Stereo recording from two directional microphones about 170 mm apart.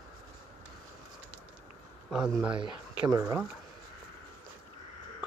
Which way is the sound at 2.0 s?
Centre (ahead or behind).